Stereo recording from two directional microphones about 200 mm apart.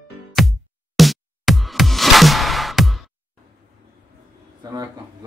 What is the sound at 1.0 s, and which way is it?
Music, centre (ahead or behind).